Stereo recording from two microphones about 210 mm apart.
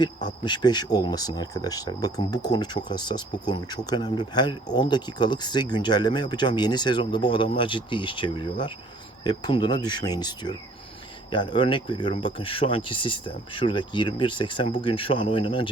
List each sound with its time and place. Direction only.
0.3 s speech: 20° left (ahead or behind)